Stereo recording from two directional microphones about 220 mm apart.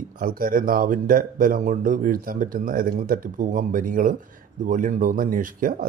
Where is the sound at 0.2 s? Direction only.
40° right (ahead or behind).